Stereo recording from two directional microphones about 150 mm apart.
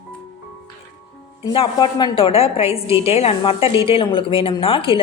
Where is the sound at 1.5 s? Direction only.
35° left (ahead or behind).